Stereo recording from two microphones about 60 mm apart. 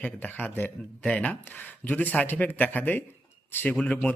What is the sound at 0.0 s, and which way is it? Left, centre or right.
Speech, left.